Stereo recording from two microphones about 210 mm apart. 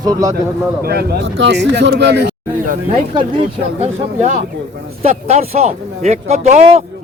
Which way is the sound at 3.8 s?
35° right (ahead or behind).